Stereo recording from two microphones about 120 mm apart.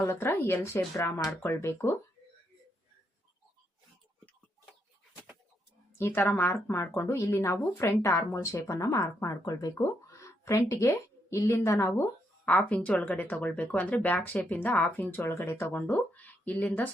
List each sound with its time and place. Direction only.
0.0 s speech: 20° left (ahead or behind)
6.0 s speech: 20° left (ahead or behind)